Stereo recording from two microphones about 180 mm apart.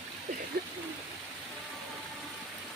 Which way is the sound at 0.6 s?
60° right (ahead or behind).